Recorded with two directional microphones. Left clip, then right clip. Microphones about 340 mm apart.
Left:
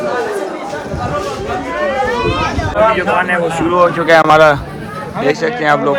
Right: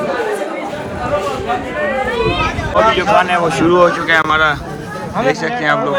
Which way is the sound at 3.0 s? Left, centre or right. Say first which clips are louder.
Right 1 dB; centre.